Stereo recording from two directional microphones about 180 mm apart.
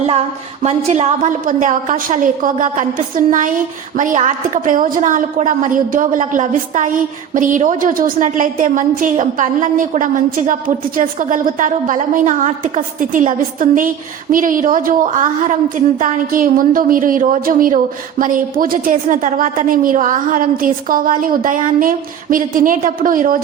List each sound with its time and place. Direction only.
0.6 s a woman's voice: 35° right (ahead or behind)